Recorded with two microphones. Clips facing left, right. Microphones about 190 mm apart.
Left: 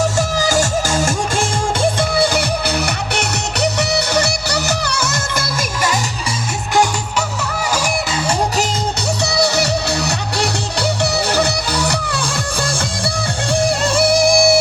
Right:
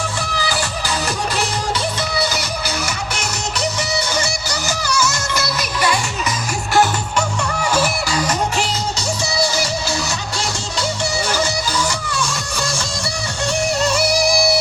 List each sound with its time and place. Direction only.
0.0 s music: 45° left (ahead or behind)
6.7 s music: 10° left (ahead or behind)
8.1 s music: 25° left (ahead or behind)
9.2 s music: 65° left (ahead or behind)
13.8 s music: 55° left (ahead or behind)